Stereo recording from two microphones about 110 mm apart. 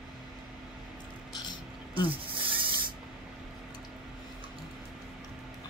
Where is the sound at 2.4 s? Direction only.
50° right (ahead or behind).